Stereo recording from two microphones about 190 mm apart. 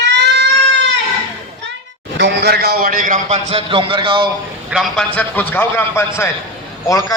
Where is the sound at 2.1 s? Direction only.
60° right (ahead or behind); by 4.3 s 25° right (ahead or behind).